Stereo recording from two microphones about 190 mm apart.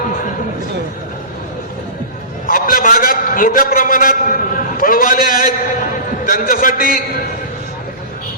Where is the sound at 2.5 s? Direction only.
50° left (ahead or behind).